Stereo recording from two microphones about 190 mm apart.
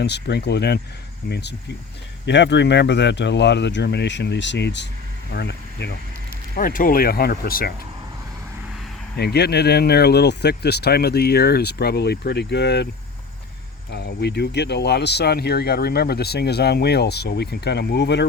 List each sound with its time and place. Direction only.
0.0 s speech: 60° left (ahead or behind)
6.6 s speech: 45° left (ahead or behind)
9.1 s speech: 60° left (ahead or behind)
13.9 s speech: 60° left (ahead or behind)